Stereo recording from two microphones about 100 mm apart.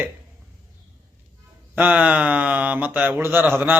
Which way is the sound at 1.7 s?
15° right (ahead or behind).